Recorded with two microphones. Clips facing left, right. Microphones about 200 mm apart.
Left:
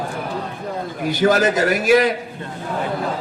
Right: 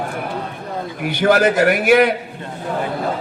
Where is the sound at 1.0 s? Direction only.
60° right (ahead or behind).